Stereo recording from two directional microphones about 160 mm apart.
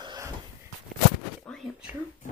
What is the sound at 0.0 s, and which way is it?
Wheeze, 25° right (ahead or behind).